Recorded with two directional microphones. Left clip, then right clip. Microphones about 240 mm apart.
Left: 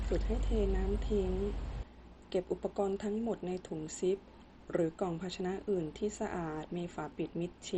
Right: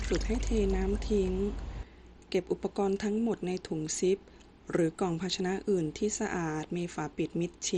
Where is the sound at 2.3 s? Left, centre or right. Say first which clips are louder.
Right 4 dB; right.